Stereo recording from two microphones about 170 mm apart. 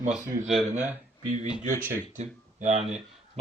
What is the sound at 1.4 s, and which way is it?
Speech, 40° right (ahead or behind).